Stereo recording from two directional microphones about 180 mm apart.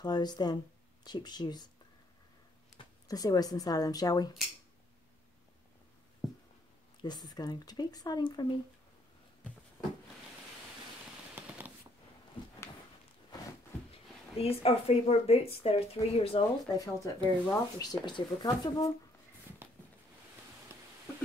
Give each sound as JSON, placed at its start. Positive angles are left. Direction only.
{"t": 0.0, "sound": "speech", "side_deg": 20}
{"t": 3.1, "sound": "speech", "side_deg": 20}
{"t": 7.0, "sound": "speech", "side_deg": 25}
{"t": 11.3, "sound": "scissors", "side_deg": -10}
{"t": 14.3, "sound": "speech", "side_deg": 35}
{"t": 16.6, "sound": "speech", "side_deg": 20}
{"t": 20.7, "sound": "a sound", "side_deg": -15}